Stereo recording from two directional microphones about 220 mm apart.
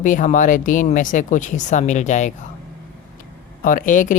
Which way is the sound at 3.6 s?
35° left (ahead or behind).